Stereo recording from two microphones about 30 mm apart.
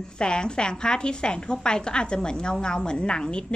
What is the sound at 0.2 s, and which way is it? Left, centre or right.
A woman's voice, left.